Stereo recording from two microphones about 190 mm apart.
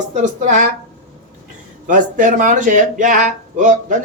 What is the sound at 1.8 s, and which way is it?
A man's voice, 45° right (ahead or behind).